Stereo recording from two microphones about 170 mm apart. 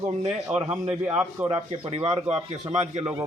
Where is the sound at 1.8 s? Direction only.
35° right (ahead or behind).